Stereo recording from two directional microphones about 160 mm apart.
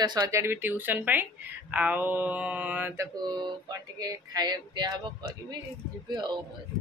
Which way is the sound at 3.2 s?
25° right (ahead or behind).